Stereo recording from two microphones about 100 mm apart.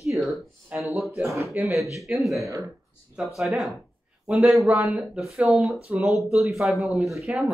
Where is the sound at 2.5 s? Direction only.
35° right (ahead or behind).